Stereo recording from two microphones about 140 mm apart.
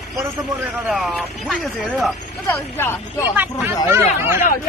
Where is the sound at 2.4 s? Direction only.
15° left (ahead or behind).